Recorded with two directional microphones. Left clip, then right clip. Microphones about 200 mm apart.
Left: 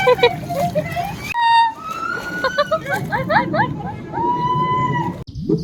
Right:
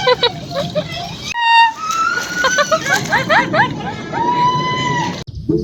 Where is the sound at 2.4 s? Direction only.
20° right (ahead or behind).